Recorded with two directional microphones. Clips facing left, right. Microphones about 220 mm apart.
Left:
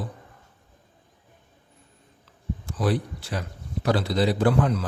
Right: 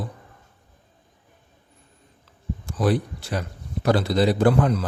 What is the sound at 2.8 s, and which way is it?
A man's voice, 45° right (ahead or behind).